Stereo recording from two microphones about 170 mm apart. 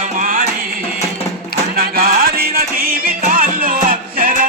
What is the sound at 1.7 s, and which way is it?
Music, 60° right (ahead or behind).